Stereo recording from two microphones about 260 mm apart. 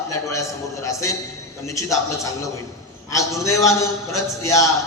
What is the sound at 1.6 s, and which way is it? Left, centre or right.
Speech, centre.